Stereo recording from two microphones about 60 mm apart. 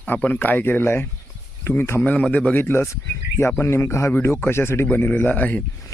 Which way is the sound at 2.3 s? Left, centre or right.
Left.